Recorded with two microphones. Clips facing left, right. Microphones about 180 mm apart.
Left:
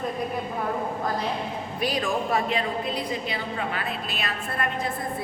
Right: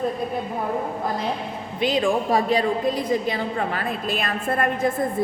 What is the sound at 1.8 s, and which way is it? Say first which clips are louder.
A woman's voice: right 6 dB; 25° right (ahead or behind).